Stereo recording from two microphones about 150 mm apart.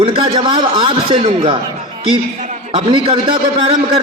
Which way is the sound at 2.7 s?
35° right (ahead or behind).